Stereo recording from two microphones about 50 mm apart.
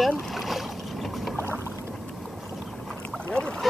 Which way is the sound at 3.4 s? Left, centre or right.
Left.